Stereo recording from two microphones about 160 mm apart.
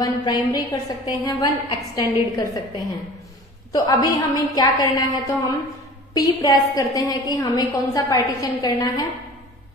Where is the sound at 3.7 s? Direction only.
20° left (ahead or behind).